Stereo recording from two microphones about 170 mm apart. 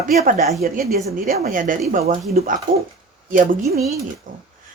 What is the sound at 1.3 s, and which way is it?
Speech, 55° right (ahead or behind).